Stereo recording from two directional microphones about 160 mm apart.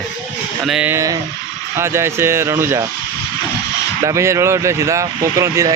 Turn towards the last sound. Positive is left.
turn(degrees=-20)  # may be behind; listen again after turning